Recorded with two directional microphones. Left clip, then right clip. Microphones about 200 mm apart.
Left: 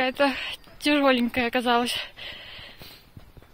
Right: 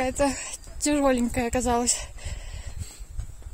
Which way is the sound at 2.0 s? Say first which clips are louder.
Left 6 dB; 10° right (ahead or behind).